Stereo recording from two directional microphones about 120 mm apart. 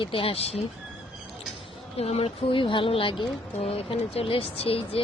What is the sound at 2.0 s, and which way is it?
Speech, 60° left (ahead or behind).